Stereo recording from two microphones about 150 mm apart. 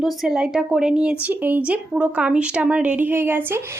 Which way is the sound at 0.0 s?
5° right (ahead or behind).